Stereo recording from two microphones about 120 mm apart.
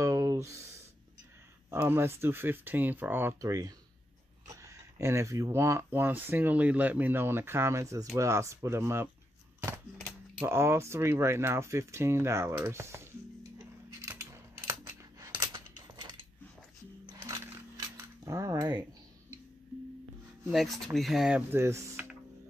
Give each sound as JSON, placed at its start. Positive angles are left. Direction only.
{"t": 0.0, "sound": "a sound", "side_deg": -25}
{"t": 1.7, "sound": "speech", "side_deg": -20}
{"t": 10.4, "sound": "speech", "side_deg": -20}
{"t": 14.0, "sound": "coin", "side_deg": -20}
{"t": 15.3, "sound": "a sound", "side_deg": -40}
{"t": 17.2, "sound": "coin", "side_deg": -25}
{"t": 20.5, "sound": "speech", "side_deg": 0}
{"t": 21.4, "sound": "speech", "side_deg": -20}